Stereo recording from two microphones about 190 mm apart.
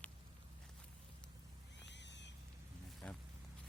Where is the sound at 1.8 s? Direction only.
65° left (ahead or behind).